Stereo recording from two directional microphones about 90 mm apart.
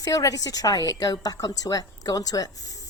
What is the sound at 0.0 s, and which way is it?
A woman's voice, 40° left (ahead or behind).